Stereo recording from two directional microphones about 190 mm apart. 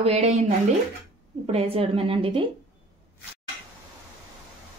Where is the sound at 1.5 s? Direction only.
30° right (ahead or behind).